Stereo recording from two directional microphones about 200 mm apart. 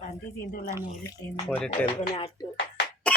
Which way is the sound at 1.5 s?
5° left (ahead or behind).